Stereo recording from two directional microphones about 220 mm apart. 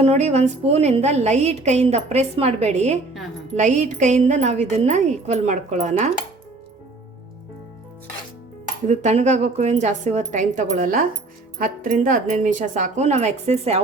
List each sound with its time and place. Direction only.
0.0 s a woman's voice: 30° right (ahead or behind)
8.9 s speech: 30° right (ahead or behind)